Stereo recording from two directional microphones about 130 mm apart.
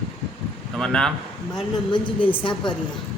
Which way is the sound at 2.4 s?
35° left (ahead or behind).